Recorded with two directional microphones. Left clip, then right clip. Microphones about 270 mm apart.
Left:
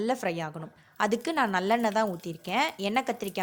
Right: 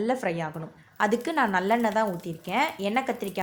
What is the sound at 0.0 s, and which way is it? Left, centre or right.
Speech, left.